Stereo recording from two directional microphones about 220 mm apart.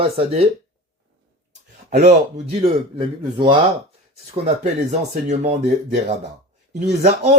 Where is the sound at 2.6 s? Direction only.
20° right (ahead or behind).